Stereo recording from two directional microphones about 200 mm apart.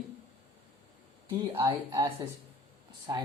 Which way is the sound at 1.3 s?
20° right (ahead or behind).